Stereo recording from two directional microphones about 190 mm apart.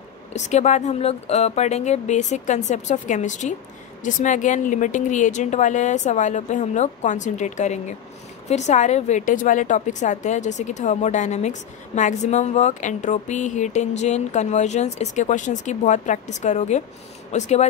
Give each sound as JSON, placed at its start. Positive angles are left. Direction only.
{"t": 0.3, "sound": "a woman's voice", "side_deg": 35}